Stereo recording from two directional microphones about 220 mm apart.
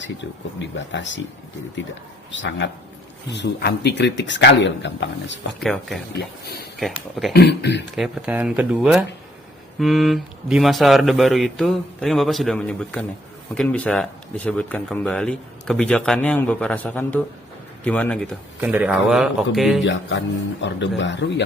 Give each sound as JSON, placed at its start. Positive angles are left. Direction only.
{"t": 0.8, "sound": "speech", "side_deg": 55}
{"t": 2.3, "sound": "speech", "side_deg": 55}
{"t": 5.5, "sound": "speech", "side_deg": 0}
{"t": 6.1, "sound": "speech", "side_deg": 45}
{"t": 6.7, "sound": "speech", "side_deg": 0}
{"t": 7.3, "sound": "speech", "side_deg": 50}
{"t": 7.9, "sound": "speech", "side_deg": -5}
{"t": 18.6, "sound": "speech", "side_deg": -5}
{"t": 19.9, "sound": "speech", "side_deg": 55}